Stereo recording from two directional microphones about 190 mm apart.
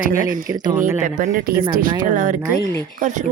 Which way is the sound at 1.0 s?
45° right (ahead or behind).